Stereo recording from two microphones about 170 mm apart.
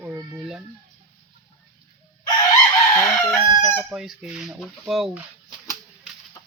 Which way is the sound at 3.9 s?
Centre (ahead or behind).